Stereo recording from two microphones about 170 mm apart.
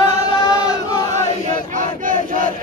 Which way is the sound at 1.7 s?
50° right (ahead or behind).